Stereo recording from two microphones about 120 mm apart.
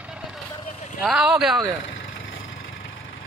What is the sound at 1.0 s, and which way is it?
Speech, 5° right (ahead or behind).